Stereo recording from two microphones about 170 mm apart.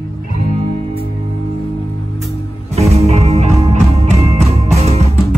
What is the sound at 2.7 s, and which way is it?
Music, 40° right (ahead or behind).